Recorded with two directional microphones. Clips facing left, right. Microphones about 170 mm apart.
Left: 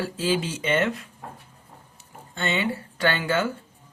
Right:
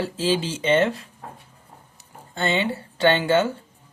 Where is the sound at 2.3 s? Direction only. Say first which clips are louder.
Right 3 dB; 30° right (ahead or behind).